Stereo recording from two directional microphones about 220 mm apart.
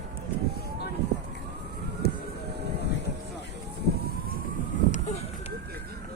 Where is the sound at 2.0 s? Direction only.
45° left (ahead or behind).